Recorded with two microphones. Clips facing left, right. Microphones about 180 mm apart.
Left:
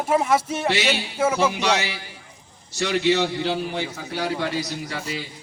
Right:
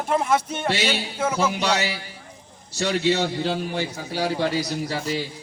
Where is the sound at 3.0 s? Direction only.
35° right (ahead or behind).